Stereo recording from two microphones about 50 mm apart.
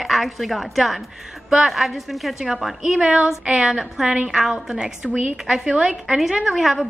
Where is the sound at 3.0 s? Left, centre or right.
Centre.